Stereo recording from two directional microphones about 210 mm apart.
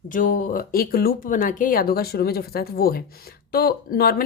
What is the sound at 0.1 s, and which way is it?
Speech, 40° left (ahead or behind).